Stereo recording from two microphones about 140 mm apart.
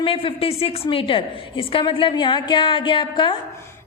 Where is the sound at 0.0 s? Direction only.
40° left (ahead or behind).